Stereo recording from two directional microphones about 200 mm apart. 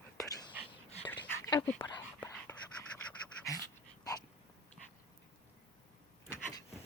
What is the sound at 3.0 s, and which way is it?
Pant, 5° left (ahead or behind).